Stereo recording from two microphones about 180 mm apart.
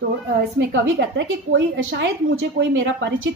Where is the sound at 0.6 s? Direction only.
80° right.